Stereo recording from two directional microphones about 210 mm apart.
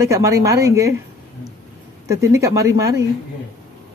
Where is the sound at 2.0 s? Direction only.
15° right (ahead or behind).